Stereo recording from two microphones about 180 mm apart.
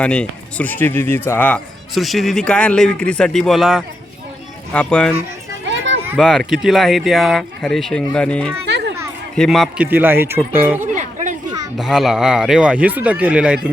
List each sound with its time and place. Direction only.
0.0 s speech: 5° left (ahead or behind)
5.6 s a sound: 90° right
6.1 s speech: centre (ahead or behind)
10.9 s chatter: 45° right (ahead or behind)
11.4 s speech: 5° right (ahead or behind)